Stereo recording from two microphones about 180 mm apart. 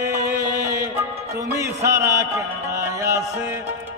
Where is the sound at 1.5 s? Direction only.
15° right (ahead or behind).